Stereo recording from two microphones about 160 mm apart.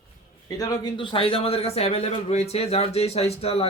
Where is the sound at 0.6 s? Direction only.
30° left (ahead or behind).